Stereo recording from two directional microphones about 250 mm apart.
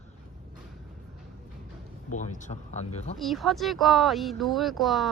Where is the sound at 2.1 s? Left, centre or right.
Left.